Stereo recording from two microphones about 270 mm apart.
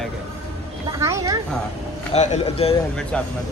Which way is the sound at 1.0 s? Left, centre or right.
Centre.